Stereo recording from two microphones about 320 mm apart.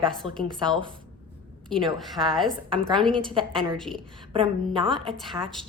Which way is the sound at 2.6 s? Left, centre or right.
Centre.